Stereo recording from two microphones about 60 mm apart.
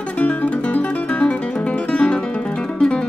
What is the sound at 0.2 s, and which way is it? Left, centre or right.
Music, left.